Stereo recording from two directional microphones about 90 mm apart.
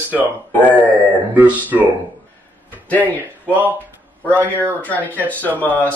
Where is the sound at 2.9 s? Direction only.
15° left (ahead or behind).